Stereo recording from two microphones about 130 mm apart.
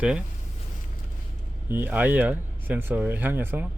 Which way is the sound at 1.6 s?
15° right (ahead or behind).